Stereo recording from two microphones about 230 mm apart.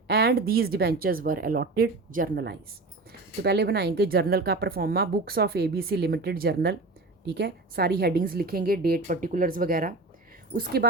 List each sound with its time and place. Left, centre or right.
0.1 s a woman's voice: right